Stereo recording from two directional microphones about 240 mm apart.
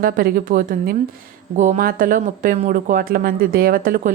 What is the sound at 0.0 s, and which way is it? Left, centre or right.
Speech, right.